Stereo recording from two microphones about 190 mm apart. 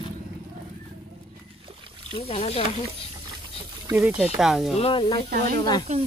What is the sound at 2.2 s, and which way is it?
Speech, 30° left (ahead or behind).